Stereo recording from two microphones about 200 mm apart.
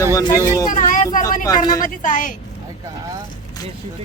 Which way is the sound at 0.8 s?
40° left (ahead or behind).